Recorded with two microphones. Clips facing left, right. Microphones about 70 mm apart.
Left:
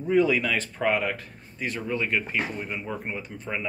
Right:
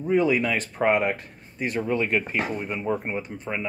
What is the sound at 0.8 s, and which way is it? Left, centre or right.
Speech, right.